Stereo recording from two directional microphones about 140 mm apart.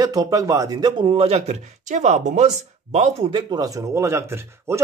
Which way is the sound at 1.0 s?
45° right (ahead or behind).